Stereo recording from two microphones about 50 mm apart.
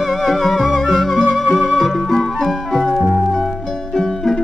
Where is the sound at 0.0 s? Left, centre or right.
Centre.